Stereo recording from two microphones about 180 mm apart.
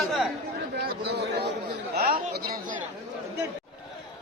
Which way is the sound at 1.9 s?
55° right (ahead or behind).